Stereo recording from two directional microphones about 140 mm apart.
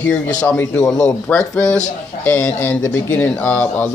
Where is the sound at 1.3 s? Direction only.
5° left (ahead or behind).